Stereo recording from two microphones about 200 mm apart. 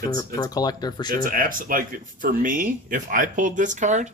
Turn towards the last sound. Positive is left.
turn(degrees=-35)  # may be behind; listen again after turning